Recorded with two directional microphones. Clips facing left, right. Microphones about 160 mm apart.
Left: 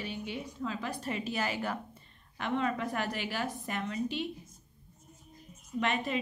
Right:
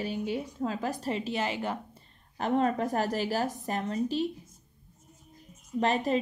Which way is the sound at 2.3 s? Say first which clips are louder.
Right 5 dB; 40° right (ahead or behind).